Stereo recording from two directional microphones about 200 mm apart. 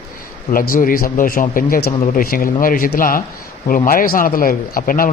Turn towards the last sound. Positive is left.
turn(degrees=45)  # may be behind; listen again after turning